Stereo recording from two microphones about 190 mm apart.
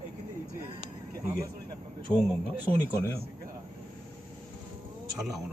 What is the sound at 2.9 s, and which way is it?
Speech, 15° left (ahead or behind).